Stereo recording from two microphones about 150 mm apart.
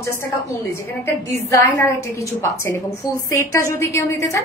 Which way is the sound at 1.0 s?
20° left (ahead or behind).